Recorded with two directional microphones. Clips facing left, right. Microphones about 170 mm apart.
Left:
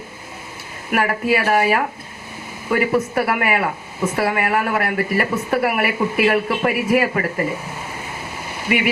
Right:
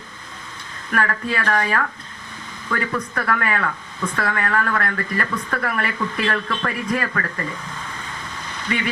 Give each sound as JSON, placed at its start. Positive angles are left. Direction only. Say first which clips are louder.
{"t": 0.9, "sound": "speech", "louder": "left 5 dB", "side_deg": 10}
{"t": 7.1, "sound": "speech", "louder": "left 5 dB", "side_deg": 25}
{"t": 7.3, "sound": "speech", "louder": "left 7 dB", "side_deg": 10}
{"t": 8.7, "sound": "speech", "louder": "left 5 dB", "side_deg": 15}